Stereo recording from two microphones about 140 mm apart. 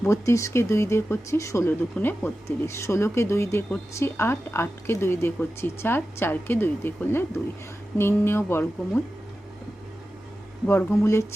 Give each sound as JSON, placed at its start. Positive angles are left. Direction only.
{"t": 0.0, "sound": "speech", "side_deg": 20}
{"t": 10.7, "sound": "speech", "side_deg": 15}